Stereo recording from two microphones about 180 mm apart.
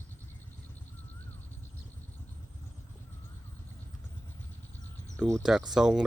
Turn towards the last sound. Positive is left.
turn(degrees=-5)  # may be behind; listen again after turning